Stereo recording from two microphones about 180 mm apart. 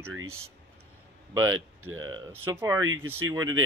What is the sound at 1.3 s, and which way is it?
Speech, 20° right (ahead or behind).